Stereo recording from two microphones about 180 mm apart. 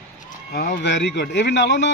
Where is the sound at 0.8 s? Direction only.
75° left (ahead or behind).